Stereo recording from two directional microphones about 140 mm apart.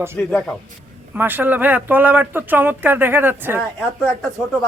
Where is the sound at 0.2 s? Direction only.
10° left (ahead or behind).